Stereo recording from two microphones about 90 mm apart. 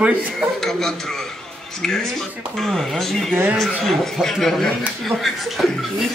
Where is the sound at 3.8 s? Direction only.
Centre (ahead or behind).